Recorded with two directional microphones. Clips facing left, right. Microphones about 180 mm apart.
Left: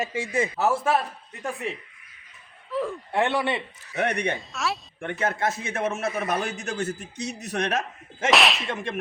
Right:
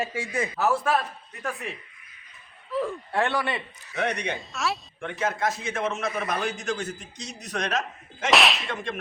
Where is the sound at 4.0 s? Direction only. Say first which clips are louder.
Left 2 dB; 55° left (ahead or behind).